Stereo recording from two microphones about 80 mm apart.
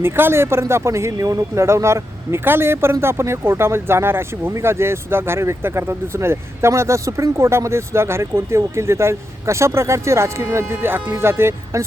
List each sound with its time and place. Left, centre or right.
0.0 s speech: right